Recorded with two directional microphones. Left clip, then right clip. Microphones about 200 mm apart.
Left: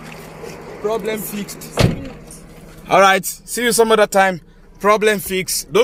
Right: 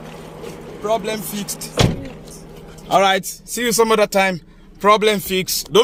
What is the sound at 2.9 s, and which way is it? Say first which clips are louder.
Speech: left 3 dB; 30° left (ahead or behind).